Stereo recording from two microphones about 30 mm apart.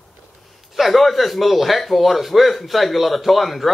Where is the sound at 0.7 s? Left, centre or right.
Centre.